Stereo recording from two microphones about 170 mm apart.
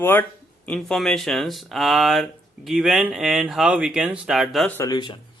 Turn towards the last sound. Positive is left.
turn(degrees=25)  # may be behind; listen again after turning